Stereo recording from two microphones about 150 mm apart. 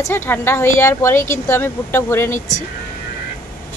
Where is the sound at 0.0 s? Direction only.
15° left (ahead or behind).